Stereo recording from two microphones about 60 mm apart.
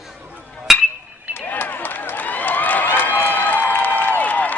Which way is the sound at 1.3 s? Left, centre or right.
Left.